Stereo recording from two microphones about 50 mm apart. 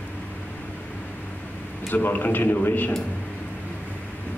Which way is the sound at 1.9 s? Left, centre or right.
Left.